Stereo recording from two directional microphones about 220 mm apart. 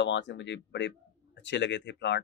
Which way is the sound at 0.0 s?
55° left (ahead or behind).